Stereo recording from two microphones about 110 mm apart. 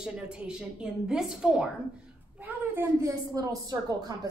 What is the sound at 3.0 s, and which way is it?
A woman's voice, 30° right (ahead or behind).